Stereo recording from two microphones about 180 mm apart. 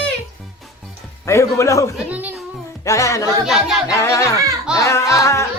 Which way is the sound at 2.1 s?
10° right (ahead or behind).